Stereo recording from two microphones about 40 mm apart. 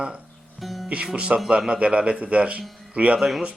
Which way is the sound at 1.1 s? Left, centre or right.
Right.